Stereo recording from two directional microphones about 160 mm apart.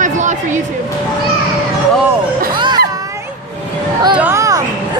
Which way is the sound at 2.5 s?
30° right (ahead or behind).